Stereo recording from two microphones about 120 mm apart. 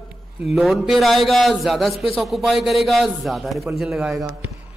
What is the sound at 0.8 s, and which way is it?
A man's voice, centre (ahead or behind).